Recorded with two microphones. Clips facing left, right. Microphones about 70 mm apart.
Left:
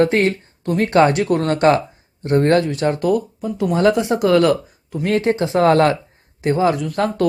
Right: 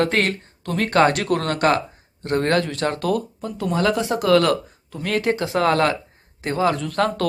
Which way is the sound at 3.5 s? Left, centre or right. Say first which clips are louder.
Left 5 dB; left.